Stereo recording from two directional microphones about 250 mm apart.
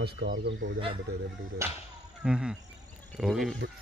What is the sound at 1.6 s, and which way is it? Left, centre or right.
Speech, centre.